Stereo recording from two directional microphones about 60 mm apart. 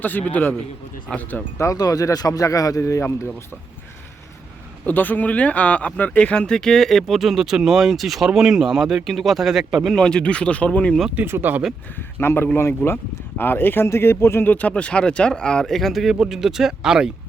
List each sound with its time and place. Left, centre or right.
0.0 s a man's voice: left
1.7 s speech: left
4.9 s speech: left
6.7 s speech: centre
9.9 s speech: centre
11.3 s speech: right
12.2 s a man's voice: left
14.4 s speech: left
14.7 s speech: centre
15.7 s speech: centre